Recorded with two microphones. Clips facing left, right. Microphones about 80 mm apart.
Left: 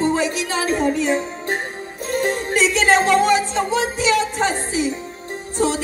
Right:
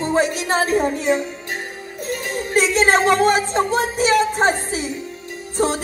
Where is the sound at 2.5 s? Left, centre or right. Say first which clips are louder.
Right 1 dB; right.